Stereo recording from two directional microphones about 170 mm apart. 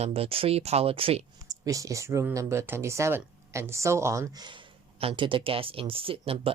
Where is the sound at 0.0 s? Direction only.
35° right (ahead or behind).